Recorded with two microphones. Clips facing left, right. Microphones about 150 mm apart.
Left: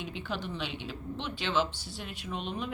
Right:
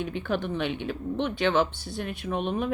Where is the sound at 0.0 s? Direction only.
55° right (ahead or behind).